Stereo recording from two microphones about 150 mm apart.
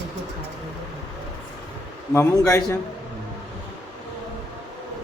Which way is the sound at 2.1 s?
20° left (ahead or behind).